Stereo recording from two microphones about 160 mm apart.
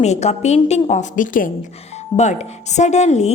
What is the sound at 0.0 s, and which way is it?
A woman's voice, 45° left (ahead or behind).